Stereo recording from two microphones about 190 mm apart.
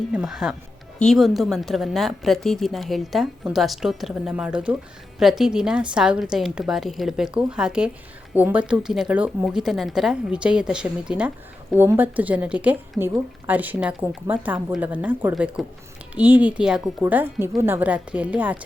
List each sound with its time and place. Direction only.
0.1 s a woman's voice: 5° right (ahead or behind)